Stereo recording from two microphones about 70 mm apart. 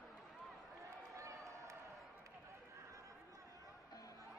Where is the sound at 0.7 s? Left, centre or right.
Right.